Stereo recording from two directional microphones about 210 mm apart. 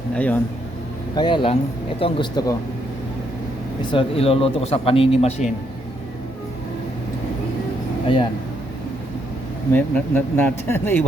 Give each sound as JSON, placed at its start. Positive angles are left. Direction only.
{"t": 0.1, "sound": "speech", "side_deg": 5}
{"t": 1.1, "sound": "speech", "side_deg": 20}
{"t": 3.8, "sound": "speech", "side_deg": 25}
{"t": 9.7, "sound": "speech", "side_deg": 10}